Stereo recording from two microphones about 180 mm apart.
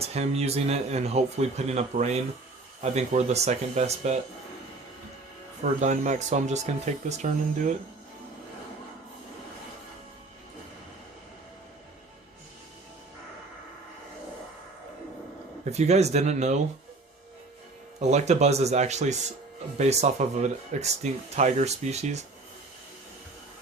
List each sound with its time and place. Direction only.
0.0 s speech: 35° right (ahead or behind)
5.8 s speech: 45° right (ahead or behind)
15.7 s speech: 35° right (ahead or behind)
18.0 s speech: 40° right (ahead or behind)